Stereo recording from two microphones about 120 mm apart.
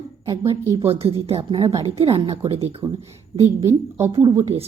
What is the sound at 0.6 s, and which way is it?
Speech, 20° right (ahead or behind).